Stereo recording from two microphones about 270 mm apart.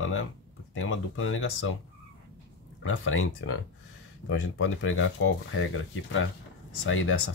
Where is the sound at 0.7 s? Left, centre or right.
Left.